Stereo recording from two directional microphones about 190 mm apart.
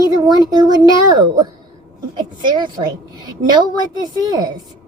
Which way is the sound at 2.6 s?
20° right (ahead or behind).